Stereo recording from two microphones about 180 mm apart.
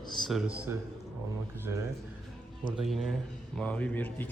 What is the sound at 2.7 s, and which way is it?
Speech, centre (ahead or behind).